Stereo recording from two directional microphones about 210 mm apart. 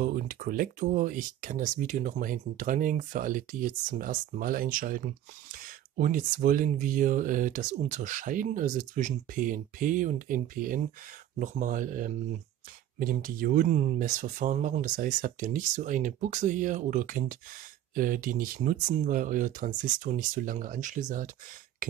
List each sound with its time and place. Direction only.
0.0 s speech: 40° right (ahead or behind)